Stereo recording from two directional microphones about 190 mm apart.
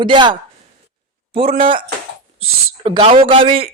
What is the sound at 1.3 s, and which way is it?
Speech, 30° right (ahead or behind).